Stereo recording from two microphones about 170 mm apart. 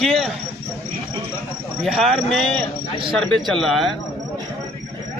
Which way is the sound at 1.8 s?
Centre (ahead or behind).